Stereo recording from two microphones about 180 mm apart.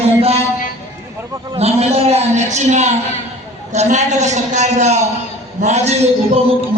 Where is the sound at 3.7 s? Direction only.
40° right (ahead or behind).